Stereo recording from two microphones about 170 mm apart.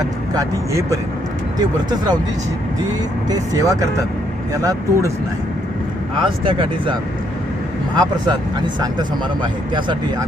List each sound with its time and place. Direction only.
0.0 s speech: 20° right (ahead or behind)
3.2 s speech: 20° right (ahead or behind)
6.2 s speech: 30° right (ahead or behind)
7.9 s speech: 25° right (ahead or behind)